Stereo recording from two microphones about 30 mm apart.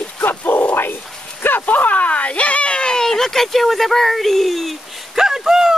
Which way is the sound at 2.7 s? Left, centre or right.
Left.